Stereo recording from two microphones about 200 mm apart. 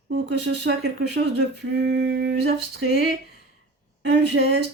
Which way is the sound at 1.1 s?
60° right (ahead or behind).